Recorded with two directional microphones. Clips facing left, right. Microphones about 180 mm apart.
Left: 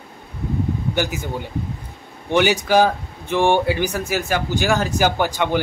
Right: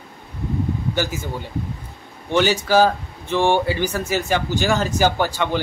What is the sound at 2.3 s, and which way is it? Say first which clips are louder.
Speech: left 1 dB; 15° left (ahead or behind).